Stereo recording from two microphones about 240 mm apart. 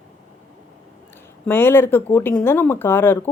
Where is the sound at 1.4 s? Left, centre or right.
Centre.